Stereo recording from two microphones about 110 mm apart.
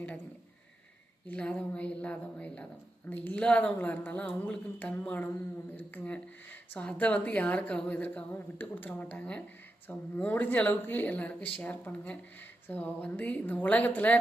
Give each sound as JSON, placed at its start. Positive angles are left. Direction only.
{"t": 1.3, "sound": "a woman's voice", "side_deg": 10}